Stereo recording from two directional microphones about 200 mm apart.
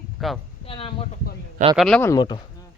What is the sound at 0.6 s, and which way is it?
Speech, 25° left (ahead or behind).